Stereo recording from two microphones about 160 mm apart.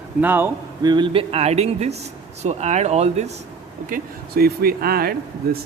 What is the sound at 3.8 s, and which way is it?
Speech, 65° right (ahead or behind).